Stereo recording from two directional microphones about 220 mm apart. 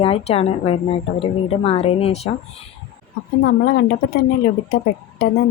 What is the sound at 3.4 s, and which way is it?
Speech, 50° left (ahead or behind).